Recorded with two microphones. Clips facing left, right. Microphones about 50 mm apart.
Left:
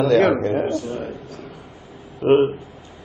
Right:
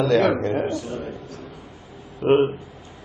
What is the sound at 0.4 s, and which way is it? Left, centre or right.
Speech, centre.